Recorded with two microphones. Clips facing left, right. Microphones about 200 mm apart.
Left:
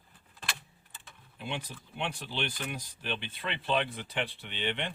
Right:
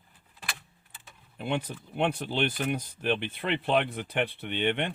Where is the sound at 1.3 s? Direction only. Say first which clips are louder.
Right 7 dB; 55° right (ahead or behind).